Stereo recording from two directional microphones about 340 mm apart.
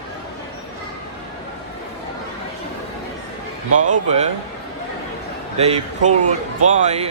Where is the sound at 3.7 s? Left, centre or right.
Right.